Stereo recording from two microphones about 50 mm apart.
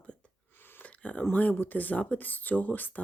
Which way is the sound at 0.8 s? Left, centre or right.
Left.